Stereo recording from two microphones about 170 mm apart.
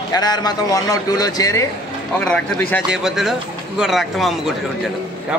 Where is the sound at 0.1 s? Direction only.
25° left (ahead or behind).